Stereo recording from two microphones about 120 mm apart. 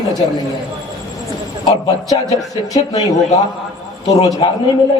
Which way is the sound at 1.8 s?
30° left (ahead or behind).